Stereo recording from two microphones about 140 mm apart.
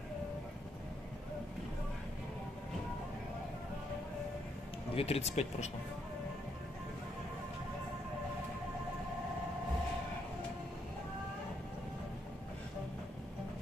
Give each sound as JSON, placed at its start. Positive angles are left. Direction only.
{"t": 4.9, "sound": "speech", "side_deg": 45}